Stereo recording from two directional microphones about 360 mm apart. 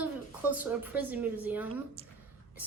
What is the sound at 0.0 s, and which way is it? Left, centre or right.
A woman's voice, centre.